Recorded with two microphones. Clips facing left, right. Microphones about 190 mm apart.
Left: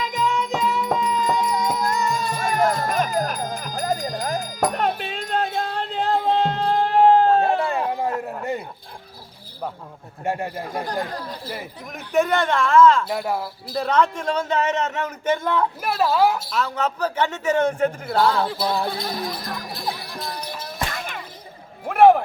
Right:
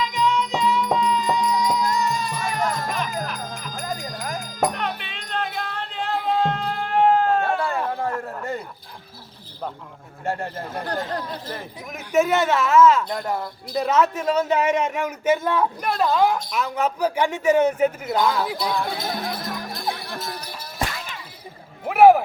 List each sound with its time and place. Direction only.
0.0 s music: 50° left (ahead or behind)
5.5 s a sound: 25° left (ahead or behind)
5.9 s music: 40° left (ahead or behind)
6.1 s music: 25° left (ahead or behind)
7.4 s a sound: 20° left (ahead or behind)
10.2 s speech: 15° left (ahead or behind)
11.9 s speech: centre (ahead or behind)
13.1 s speech: 5° left (ahead or behind); by 15.6 s 10° right (ahead or behind)
15.8 s speech: 5° left (ahead or behind)
16.6 s speech: 10° right (ahead or behind)
18.9 s music: centre (ahead or behind)
20.9 s music: 55° left (ahead or behind)
21.8 s a sound: 5° right (ahead or behind)